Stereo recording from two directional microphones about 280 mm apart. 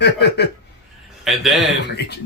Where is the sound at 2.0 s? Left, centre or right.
Left.